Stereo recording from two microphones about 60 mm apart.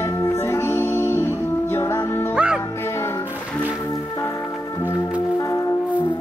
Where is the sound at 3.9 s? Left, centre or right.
Left.